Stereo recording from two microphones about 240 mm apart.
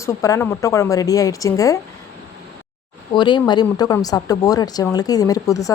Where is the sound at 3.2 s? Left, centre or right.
Centre.